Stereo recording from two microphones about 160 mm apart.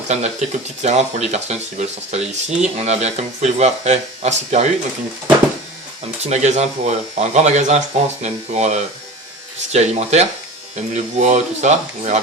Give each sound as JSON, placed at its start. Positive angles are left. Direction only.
{"t": 0.1, "sound": "speech", "side_deg": -45}
{"t": 6.2, "sound": "speech", "side_deg": -45}